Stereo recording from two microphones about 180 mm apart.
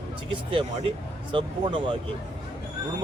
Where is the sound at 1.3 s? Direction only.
25° right (ahead or behind).